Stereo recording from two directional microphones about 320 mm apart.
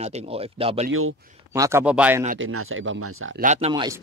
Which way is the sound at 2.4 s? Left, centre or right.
Right.